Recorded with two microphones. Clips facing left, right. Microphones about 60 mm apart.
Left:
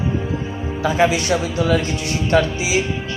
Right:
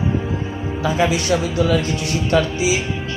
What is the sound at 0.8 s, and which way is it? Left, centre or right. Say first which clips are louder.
Speech: left 2 dB; left.